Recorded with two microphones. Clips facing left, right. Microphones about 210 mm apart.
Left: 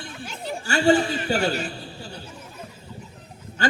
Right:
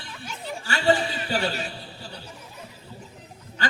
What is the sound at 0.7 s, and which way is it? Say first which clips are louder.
Speech: left 4 dB; 50° left (ahead or behind).